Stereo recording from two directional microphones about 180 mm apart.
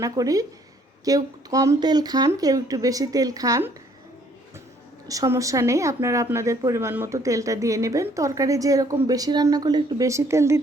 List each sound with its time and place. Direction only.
0.0 s speech: 20° right (ahead or behind)
5.0 s a woman's voice: 20° right (ahead or behind)